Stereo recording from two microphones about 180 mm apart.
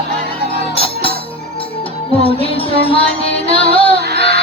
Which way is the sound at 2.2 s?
30° left (ahead or behind).